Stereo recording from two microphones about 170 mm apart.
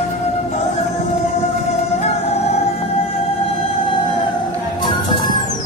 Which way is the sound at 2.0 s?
40° left (ahead or behind).